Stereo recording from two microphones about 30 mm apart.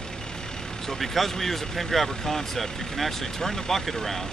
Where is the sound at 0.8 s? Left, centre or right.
Centre.